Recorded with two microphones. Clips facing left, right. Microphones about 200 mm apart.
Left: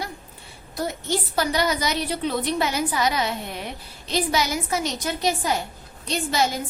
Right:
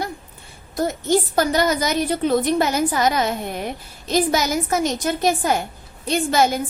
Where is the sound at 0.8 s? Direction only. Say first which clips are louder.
Right 7 dB; 45° right (ahead or behind).